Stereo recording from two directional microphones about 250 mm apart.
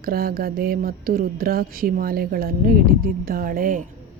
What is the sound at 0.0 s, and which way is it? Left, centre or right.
Speech, right.